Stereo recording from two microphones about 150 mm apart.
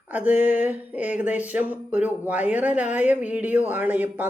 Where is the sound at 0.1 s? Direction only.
10° right (ahead or behind).